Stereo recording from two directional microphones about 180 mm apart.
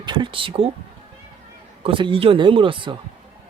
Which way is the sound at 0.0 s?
25° right (ahead or behind).